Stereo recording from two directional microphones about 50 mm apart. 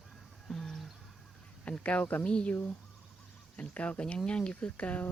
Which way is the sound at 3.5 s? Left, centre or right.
Left.